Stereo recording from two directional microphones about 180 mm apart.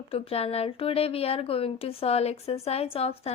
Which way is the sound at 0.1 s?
35° left (ahead or behind).